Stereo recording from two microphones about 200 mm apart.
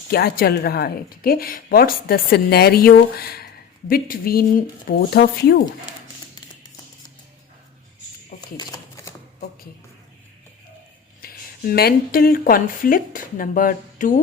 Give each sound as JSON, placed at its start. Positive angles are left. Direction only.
{"t": 0.1, "sound": "a woman's voice", "side_deg": 50}
{"t": 8.4, "sound": "typewriter", "side_deg": 20}
{"t": 11.2, "sound": "speech", "side_deg": 45}